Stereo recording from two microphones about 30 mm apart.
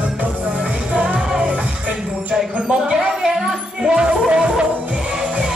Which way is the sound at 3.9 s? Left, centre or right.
Right.